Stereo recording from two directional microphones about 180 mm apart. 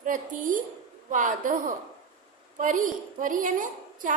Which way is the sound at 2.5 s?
45° right (ahead or behind).